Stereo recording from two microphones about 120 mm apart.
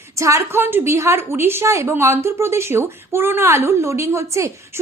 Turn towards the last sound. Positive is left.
turn(degrees=-25)  # may be behind; listen again after turning